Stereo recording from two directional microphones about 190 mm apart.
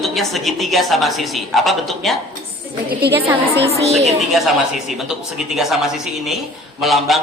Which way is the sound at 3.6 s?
35° right (ahead or behind).